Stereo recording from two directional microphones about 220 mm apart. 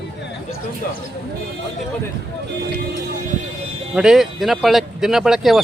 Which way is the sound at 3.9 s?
5° right (ahead or behind).